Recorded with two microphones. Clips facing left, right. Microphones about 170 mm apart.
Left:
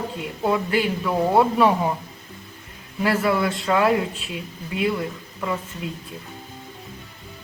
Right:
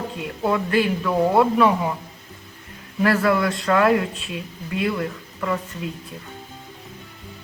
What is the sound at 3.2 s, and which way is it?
Speech, 5° left (ahead or behind).